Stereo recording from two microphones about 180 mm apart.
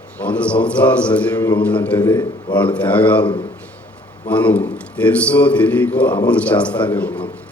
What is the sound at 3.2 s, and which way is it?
Speech, 25° left (ahead or behind).